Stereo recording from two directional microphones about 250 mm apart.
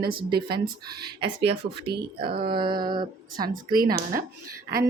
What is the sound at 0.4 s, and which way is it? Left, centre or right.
Speech, right.